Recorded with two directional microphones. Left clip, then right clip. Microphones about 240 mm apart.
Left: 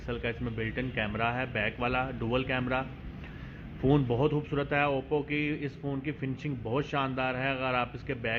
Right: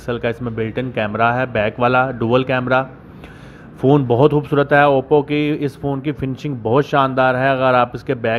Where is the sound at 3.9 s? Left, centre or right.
Right.